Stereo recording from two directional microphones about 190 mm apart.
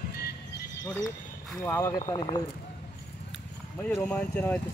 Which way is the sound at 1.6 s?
15° left (ahead or behind).